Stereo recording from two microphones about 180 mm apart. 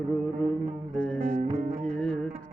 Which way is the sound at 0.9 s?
5° left (ahead or behind).